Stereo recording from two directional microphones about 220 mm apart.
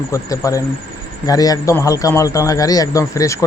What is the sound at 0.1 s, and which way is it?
A man's voice, 15° left (ahead or behind).